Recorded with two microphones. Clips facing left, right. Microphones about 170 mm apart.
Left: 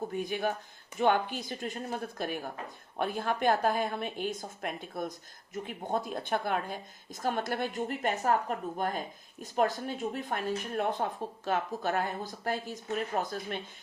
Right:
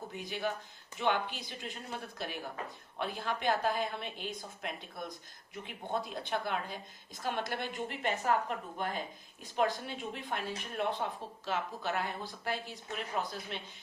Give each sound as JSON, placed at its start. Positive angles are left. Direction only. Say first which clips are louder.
{"t": 0.2, "sound": "a woman's voice", "louder": "left 3 dB", "side_deg": 50}